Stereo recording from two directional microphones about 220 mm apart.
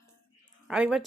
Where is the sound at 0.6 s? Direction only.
5° right (ahead or behind).